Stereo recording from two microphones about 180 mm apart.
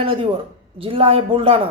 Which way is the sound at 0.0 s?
30° right (ahead or behind).